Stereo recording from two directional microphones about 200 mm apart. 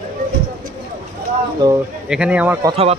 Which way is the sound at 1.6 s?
20° right (ahead or behind).